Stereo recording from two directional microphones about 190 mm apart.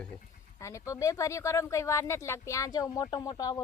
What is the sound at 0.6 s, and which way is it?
Speech, 15° left (ahead or behind).